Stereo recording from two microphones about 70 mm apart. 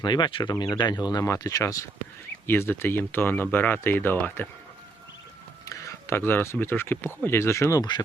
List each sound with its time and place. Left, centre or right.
0.0 s speech: left
1.2 s speech: left
2.5 s speech: left
5.6 s a sound: left
6.1 s speech: left
7.8 s speech: left